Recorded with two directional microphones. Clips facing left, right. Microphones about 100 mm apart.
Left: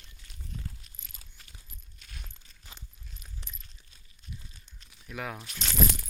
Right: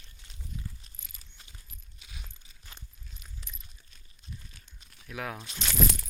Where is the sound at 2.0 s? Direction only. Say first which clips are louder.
Even; 5° right (ahead or behind).